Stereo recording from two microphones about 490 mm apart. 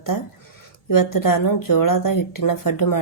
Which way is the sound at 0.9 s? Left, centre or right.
Left.